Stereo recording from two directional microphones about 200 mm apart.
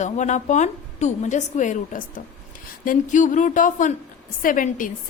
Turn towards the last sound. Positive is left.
turn(degrees=40)  # may be behind; listen again after turning